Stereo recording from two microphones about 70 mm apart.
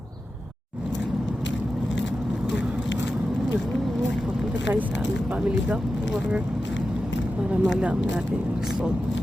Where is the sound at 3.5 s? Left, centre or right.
Centre.